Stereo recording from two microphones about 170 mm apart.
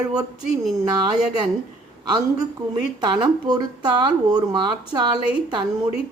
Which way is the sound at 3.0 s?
25° right (ahead or behind).